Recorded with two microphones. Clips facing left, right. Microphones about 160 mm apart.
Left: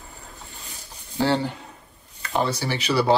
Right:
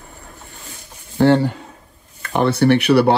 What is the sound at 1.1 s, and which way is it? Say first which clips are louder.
Speech: right 8 dB; 45° right (ahead or behind).